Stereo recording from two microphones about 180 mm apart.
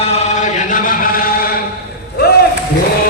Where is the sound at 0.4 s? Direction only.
45° left (ahead or behind).